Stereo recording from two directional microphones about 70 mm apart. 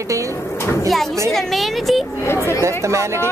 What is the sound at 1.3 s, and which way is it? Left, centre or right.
Speech, centre.